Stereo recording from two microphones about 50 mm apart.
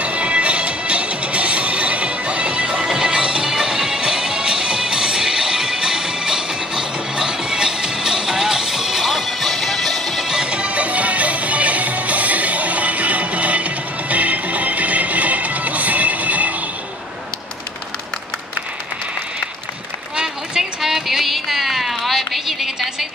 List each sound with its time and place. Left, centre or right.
0.0 s music: right; by 10.2 s centre
10.2 s music: centre
20.2 s a sound: centre